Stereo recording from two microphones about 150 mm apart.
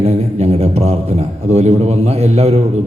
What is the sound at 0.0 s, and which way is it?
A man's voice, 45° right (ahead or behind).